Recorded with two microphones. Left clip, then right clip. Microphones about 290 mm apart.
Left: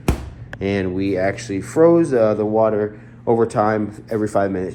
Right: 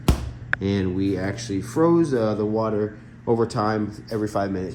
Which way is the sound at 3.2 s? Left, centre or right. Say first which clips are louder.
Left 5 dB; left.